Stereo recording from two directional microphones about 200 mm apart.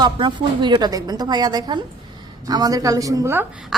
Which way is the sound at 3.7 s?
Centre (ahead or behind).